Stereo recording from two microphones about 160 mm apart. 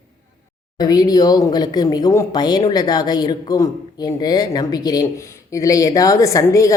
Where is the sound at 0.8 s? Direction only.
25° left (ahead or behind).